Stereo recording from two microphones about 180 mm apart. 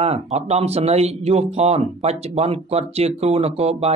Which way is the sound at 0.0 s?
35° right (ahead or behind).